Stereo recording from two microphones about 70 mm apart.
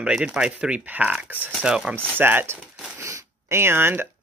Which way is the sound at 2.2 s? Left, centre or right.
Right.